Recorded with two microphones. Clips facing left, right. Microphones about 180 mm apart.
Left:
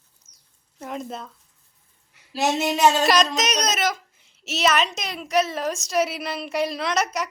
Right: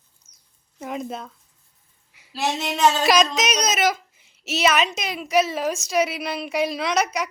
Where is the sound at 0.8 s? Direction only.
5° right (ahead or behind).